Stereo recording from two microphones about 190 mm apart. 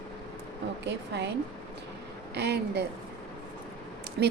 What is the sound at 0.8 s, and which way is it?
Speech, 65° right (ahead or behind).